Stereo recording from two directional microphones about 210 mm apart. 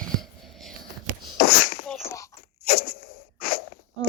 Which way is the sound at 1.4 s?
45° left (ahead or behind).